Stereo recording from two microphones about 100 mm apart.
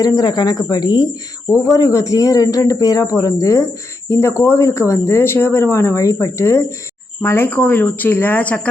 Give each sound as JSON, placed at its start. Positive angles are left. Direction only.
{"t": 0.0, "sound": "a man's voice", "side_deg": 40}